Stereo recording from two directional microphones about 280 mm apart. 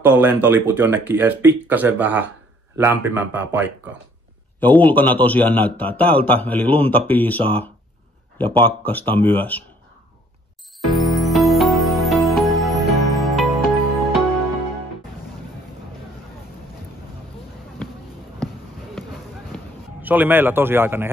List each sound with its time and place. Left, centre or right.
0.0 s speech: centre
4.6 s a man's voice: centre
10.8 s music: centre
19.5 s speech: centre